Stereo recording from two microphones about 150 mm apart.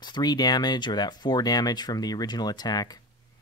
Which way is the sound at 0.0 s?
30° left (ahead or behind).